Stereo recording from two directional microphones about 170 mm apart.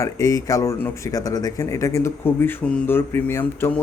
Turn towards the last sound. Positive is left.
turn(degrees=10)  # may be behind; listen again after turning